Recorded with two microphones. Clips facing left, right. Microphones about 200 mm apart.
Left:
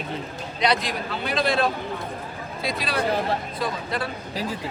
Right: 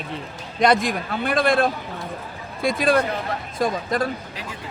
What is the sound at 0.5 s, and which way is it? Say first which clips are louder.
Speech: right 5 dB; 50° right (ahead or behind).